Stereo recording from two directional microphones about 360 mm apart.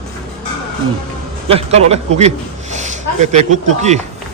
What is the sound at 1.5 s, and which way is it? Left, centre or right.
A man's voice, centre.